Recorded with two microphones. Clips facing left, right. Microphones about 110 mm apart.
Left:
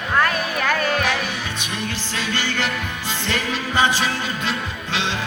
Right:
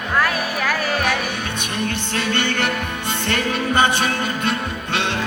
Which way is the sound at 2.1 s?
60° right (ahead or behind).